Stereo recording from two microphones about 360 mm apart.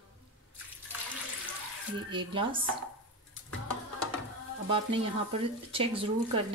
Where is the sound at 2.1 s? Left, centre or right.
Centre.